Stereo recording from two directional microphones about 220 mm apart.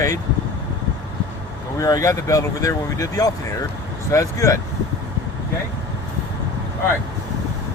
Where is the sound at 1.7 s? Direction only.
15° left (ahead or behind).